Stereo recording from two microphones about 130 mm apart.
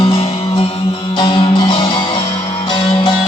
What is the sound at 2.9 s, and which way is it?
Music, 40° left (ahead or behind).